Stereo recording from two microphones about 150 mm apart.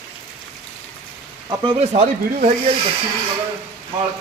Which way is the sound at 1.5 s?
35° right (ahead or behind).